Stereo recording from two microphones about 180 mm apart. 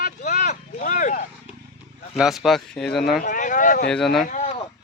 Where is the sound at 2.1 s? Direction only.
Centre (ahead or behind).